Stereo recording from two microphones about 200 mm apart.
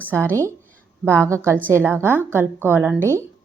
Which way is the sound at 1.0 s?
5° left (ahead or behind).